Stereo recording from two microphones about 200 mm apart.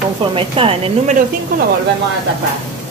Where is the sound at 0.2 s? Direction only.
25° right (ahead or behind).